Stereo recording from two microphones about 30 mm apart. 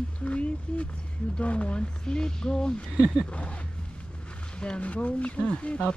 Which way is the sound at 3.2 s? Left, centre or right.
Left.